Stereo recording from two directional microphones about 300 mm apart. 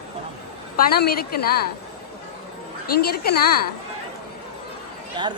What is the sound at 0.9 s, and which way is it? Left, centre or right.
Speech, left.